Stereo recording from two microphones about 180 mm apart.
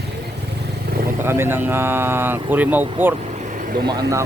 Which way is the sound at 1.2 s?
15° right (ahead or behind).